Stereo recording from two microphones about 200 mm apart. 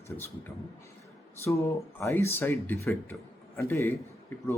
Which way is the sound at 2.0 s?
10° left (ahead or behind).